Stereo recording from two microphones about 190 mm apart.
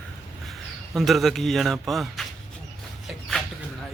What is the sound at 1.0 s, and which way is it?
A man's voice, centre (ahead or behind).